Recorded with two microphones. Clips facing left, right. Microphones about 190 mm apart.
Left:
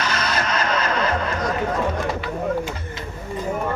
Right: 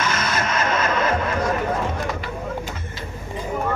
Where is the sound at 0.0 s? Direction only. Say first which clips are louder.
Even; 50° right (ahead or behind).